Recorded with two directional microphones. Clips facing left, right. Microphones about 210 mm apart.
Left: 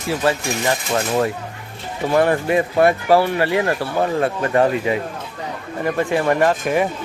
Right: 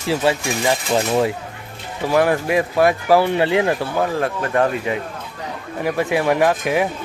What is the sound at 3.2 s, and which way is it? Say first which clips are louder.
Speech: right 1 dB; 20° right (ahead or behind).